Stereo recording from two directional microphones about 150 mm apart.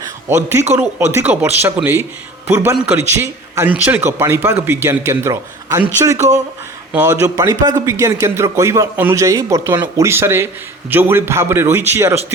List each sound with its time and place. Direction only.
0.3 s a man's voice: 15° right (ahead or behind)
6.9 s a man's voice: 15° right (ahead or behind)
10.1 s a man's voice: 15° right (ahead or behind)